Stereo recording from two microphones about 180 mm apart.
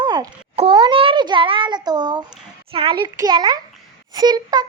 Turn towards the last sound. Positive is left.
turn(degrees=-20)  # may be behind; listen again after turning